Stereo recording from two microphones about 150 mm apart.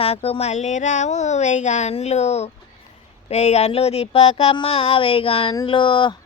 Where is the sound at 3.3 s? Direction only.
45° left (ahead or behind).